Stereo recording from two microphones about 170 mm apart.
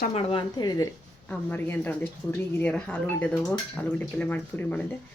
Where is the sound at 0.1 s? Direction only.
35° left (ahead or behind).